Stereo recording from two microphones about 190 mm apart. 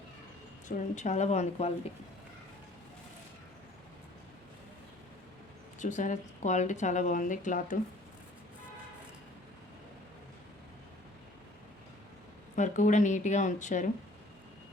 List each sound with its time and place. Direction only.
0.9 s speech: 35° left (ahead or behind)
5.8 s speech: 40° left (ahead or behind)
12.5 s speech: 40° left (ahead or behind)